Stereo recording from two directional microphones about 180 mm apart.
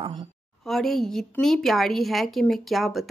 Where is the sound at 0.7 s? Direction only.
Centre (ahead or behind).